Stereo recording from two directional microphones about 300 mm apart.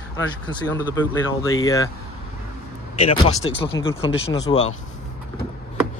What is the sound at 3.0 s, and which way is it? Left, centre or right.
Speech, centre.